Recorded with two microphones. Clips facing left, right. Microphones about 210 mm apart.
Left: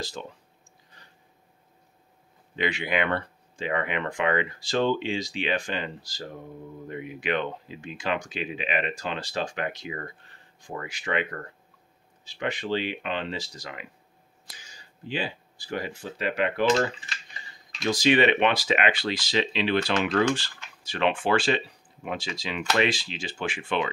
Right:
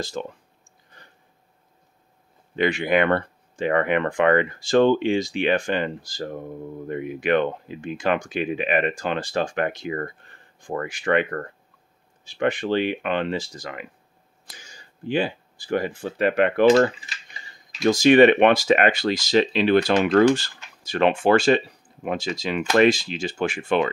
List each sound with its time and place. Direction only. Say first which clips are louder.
0.2 s speech: right 7 dB; 55° right (ahead or behind)
2.5 s speech: right 7 dB; 50° right (ahead or behind)
17.8 s speech: right 8 dB; 45° right (ahead or behind)